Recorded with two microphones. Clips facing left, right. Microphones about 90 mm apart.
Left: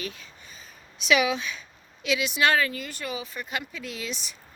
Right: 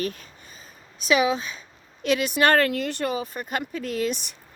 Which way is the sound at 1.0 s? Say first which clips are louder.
Right 2 dB; 35° right (ahead or behind).